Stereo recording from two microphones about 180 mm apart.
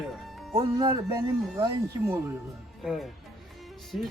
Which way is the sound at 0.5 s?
20° right (ahead or behind).